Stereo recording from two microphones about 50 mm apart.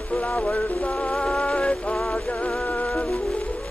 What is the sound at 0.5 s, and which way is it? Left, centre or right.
Music, left.